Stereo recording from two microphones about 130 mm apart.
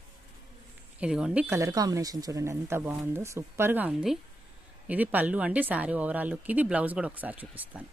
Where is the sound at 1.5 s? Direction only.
25° right (ahead or behind).